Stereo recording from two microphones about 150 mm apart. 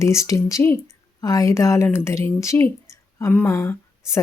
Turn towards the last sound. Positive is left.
turn(degrees=15)  # may be behind; listen again after turning